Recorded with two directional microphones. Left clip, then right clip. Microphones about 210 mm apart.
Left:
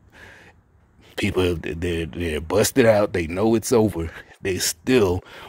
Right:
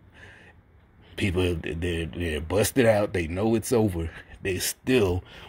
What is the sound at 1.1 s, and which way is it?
Speech, 35° left (ahead or behind).